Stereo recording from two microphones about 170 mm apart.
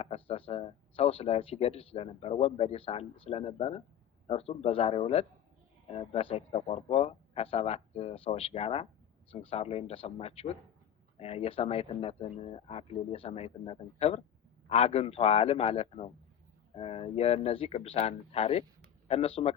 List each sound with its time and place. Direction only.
0.0 s speech: 35° left (ahead or behind)